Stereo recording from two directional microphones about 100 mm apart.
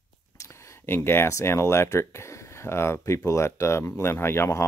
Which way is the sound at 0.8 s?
25° left (ahead or behind).